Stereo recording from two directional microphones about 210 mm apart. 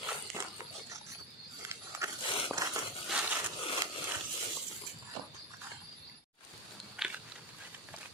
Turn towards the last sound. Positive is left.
turn(degrees=-5)  # may be behind; listen again after turning